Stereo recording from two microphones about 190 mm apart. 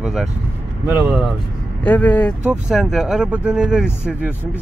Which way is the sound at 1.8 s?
5° left (ahead or behind).